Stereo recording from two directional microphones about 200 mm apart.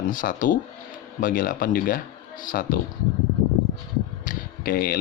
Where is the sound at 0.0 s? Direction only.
45° left (ahead or behind).